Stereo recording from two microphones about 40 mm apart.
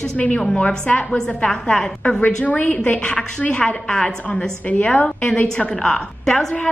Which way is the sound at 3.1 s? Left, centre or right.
Left.